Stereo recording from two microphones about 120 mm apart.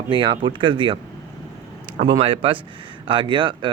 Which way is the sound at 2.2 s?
50° right (ahead or behind).